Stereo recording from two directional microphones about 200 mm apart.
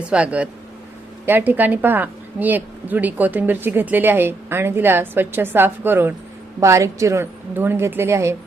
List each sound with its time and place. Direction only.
0.1 s a woman's voice: 5° right (ahead or behind)